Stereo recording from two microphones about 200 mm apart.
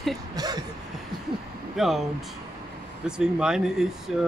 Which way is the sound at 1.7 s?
Centre (ahead or behind).